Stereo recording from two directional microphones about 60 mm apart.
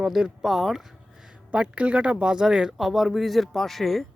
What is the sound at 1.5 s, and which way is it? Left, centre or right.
Speech, centre.